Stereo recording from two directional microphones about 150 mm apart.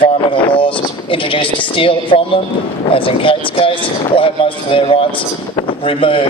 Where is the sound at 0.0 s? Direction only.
35° left (ahead or behind).